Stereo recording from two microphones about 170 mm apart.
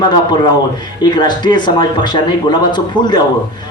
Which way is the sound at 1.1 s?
25° left (ahead or behind).